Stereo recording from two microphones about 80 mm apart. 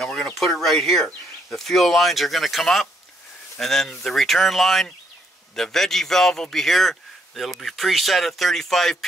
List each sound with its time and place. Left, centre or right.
0.0 s speech: centre